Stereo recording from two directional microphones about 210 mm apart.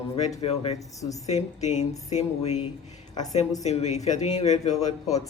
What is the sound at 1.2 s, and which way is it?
Speech, 30° left (ahead or behind).